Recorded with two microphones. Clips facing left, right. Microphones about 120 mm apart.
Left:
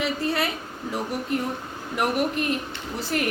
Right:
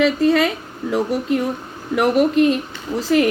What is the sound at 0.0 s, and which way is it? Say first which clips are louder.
A woman's voice: right 10 dB; 90° right.